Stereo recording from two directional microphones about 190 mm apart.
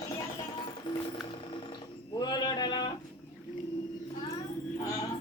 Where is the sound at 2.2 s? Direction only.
25° left (ahead or behind).